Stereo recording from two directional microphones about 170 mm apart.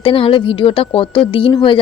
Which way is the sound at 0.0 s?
30° left (ahead or behind).